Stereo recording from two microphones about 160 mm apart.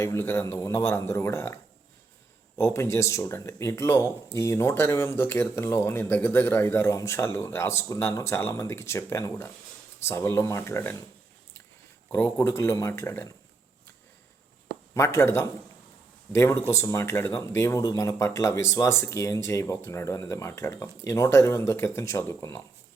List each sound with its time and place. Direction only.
0.0 s speech: 15° left (ahead or behind)
2.6 s speech: 15° left (ahead or behind)
12.1 s speech: 15° left (ahead or behind)
14.9 s speech: 15° left (ahead or behind)